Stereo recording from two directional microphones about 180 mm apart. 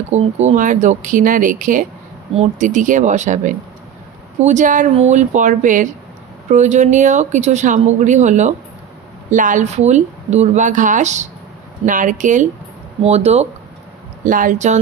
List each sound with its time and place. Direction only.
0.1 s speech: 40° right (ahead or behind)
14.2 s speech: 50° right (ahead or behind)